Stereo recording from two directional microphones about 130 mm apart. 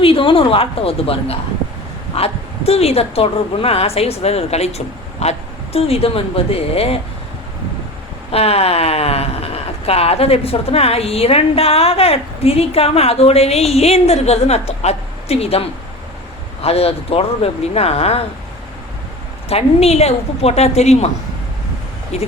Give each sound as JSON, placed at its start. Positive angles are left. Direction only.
{"t": 0.0, "sound": "speech", "side_deg": 45}
{"t": 8.3, "sound": "speech", "side_deg": 50}
{"t": 16.6, "sound": "speech", "side_deg": 50}
{"t": 19.5, "sound": "speech", "side_deg": 50}
{"t": 22.1, "sound": "speech", "side_deg": 55}